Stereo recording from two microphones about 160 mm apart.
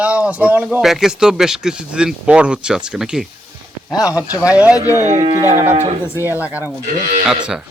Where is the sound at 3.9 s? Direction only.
20° left (ahead or behind).